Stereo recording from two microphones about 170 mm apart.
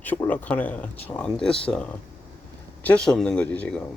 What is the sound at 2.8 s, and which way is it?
Speech, 5° left (ahead or behind).